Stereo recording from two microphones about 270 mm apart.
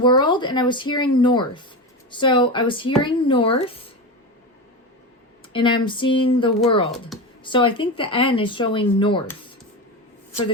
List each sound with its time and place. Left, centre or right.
0.0 s speech: centre
5.5 s speech: centre
7.1 s speech: centre
7.4 s speech: centre